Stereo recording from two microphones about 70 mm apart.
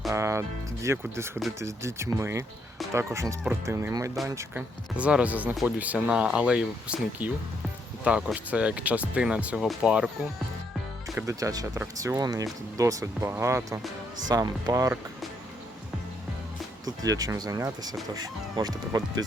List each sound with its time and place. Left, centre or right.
0.1 s speech: right
4.2 s speech: centre
4.5 s speech: centre
11.3 s speech: right
14.3 s speech: right
16.8 s speech: right
18.1 s speech: right